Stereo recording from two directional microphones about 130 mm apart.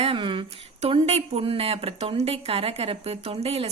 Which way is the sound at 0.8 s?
50° right (ahead or behind).